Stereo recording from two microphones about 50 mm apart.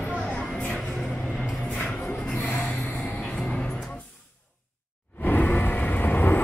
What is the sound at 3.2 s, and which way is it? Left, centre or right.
Music, centre.